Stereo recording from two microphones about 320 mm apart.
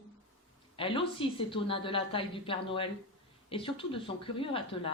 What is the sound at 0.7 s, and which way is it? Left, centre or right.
Speech, centre.